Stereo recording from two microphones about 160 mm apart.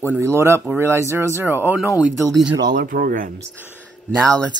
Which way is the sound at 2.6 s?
75° right (ahead or behind).